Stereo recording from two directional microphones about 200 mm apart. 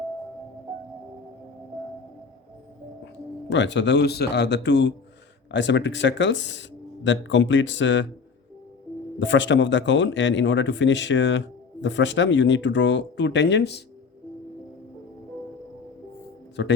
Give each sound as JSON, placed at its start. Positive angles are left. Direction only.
{"t": 3.5, "sound": "a man's voice", "side_deg": 65}
{"t": 9.1, "sound": "a man's voice", "side_deg": 65}
{"t": 16.6, "sound": "a man's voice", "side_deg": 60}